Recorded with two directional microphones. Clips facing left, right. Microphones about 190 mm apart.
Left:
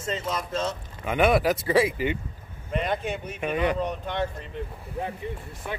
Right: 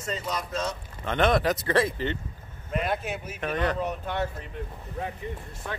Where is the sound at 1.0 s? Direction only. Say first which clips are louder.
Left 2 dB; 10° left (ahead or behind).